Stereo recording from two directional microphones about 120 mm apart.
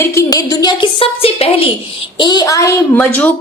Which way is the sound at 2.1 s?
40° left (ahead or behind).